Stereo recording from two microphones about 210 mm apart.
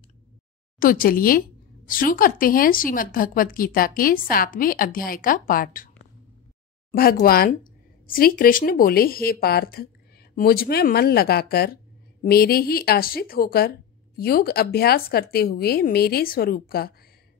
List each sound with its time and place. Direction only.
0.7 s a woman's voice: 40° left (ahead or behind)
6.9 s speech: 45° left (ahead or behind)